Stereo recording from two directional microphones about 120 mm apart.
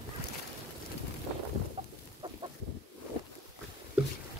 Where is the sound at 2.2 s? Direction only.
45° right (ahead or behind).